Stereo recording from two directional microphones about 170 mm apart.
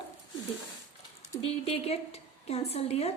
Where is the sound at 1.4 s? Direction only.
35° left (ahead or behind).